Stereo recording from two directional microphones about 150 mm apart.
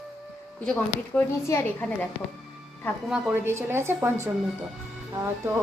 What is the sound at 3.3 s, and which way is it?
Speech, 15° right (ahead or behind).